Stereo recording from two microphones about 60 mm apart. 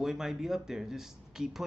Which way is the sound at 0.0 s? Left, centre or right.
Centre.